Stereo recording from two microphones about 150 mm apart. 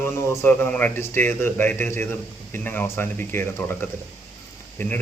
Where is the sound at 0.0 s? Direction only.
15° left (ahead or behind).